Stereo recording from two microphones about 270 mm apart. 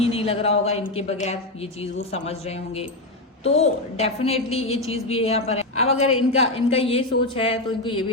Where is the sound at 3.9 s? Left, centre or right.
Left.